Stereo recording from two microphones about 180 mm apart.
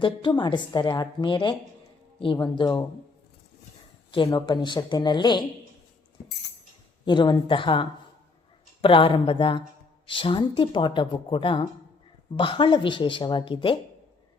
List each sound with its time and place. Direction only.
0.0 s a woman's voice: 25° left (ahead or behind)
4.1 s a woman's voice: 30° left (ahead or behind)
7.0 s a woman's voice: 25° left (ahead or behind)